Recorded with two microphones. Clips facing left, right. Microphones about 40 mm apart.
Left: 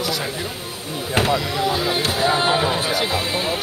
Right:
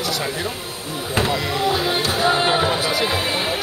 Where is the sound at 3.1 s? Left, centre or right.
Right.